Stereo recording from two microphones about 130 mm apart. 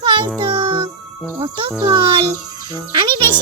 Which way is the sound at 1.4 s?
40° right (ahead or behind).